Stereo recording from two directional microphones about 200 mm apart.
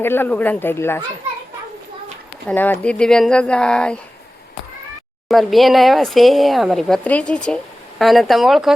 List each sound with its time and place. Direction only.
0.0 s speech: 10° left (ahead or behind)
2.5 s speech: 5° left (ahead or behind)
5.3 s speech: centre (ahead or behind)